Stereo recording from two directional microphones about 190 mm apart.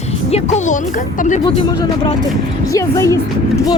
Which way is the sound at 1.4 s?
20° left (ahead or behind).